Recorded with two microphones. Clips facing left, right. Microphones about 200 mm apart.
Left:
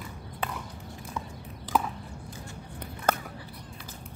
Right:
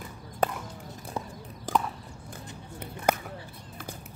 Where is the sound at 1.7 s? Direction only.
50° right (ahead or behind).